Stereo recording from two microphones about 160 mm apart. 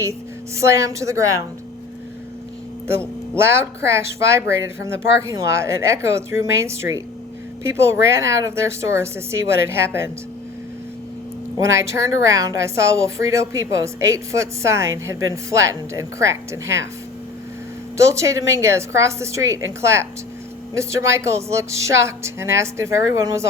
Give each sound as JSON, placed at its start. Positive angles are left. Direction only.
{"t": 0.0, "sound": "a woman's voice", "side_deg": -20}
{"t": 3.3, "sound": "speech", "side_deg": -15}
{"t": 11.5, "sound": "a woman's voice", "side_deg": -20}
{"t": 17.9, "sound": "speech", "side_deg": -20}